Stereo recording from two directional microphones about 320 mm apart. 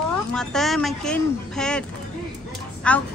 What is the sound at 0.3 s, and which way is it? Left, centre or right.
A woman's voice, centre.